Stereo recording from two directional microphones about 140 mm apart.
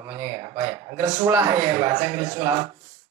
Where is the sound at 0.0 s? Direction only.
25° right (ahead or behind).